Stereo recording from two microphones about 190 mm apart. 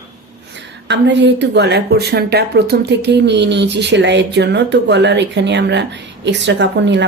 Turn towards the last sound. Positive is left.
turn(degrees=-65)  # may be behind; listen again after turning